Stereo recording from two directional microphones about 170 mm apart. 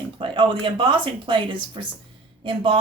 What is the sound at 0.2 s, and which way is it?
Speech, 30° right (ahead or behind).